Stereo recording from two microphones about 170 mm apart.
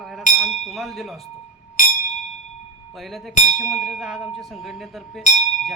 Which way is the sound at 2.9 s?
Centre (ahead or behind).